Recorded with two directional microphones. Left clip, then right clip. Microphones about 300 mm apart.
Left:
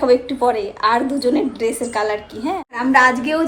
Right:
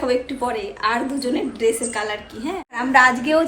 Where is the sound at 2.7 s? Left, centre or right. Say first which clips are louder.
Left 1 dB; centre.